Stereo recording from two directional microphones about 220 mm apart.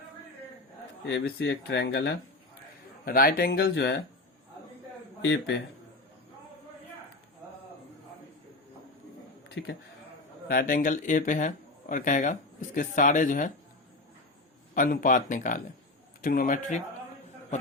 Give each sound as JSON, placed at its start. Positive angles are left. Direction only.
{"t": 1.0, "sound": "speech", "side_deg": 50}
{"t": 5.2, "sound": "speech", "side_deg": 50}
{"t": 9.6, "sound": "speech", "side_deg": 55}
{"t": 10.5, "sound": "speech", "side_deg": 40}
{"t": 14.8, "sound": "speech", "side_deg": 35}